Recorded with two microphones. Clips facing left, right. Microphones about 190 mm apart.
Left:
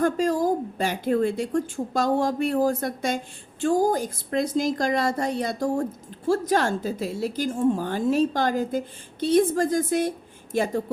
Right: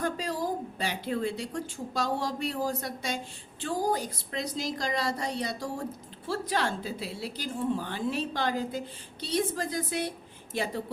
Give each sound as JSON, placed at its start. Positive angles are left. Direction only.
{"t": 0.0, "sound": "a woman's voice", "side_deg": 45}